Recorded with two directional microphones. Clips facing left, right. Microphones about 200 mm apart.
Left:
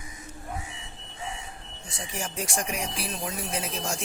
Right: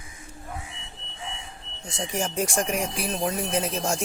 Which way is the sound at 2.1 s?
45° right (ahead or behind).